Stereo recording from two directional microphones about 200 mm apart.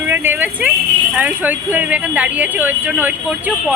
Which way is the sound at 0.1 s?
10° right (ahead or behind).